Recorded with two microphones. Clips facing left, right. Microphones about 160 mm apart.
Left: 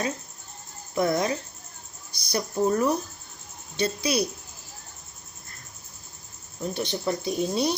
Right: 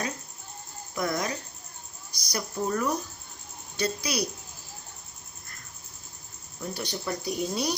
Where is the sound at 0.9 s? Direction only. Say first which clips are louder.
Left 6 dB; 30° left (ahead or behind).